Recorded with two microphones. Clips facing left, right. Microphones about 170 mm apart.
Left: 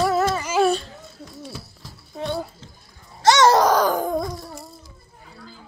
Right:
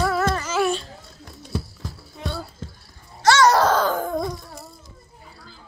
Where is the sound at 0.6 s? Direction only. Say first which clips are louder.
Left 4 dB; 25° left (ahead or behind).